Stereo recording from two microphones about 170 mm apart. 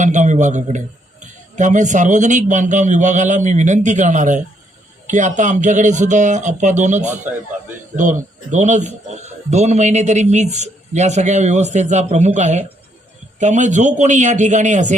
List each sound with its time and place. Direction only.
0.0 s a man's voice: 45° right (ahead or behind)